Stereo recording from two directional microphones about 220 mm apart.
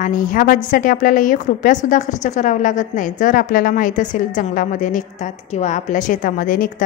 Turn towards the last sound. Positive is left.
turn(degrees=40)  # may be behind; listen again after turning